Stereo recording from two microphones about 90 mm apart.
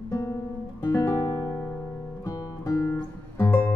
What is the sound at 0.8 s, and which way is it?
Guitar, 40° left (ahead or behind).